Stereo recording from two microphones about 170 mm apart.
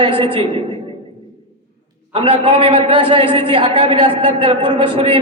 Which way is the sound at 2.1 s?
30° right (ahead or behind).